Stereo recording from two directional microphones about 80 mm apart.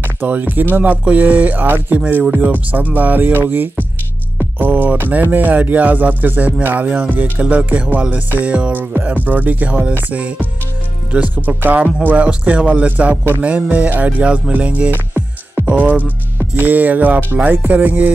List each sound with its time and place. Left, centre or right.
0.2 s speech: right
11.4 s speech: centre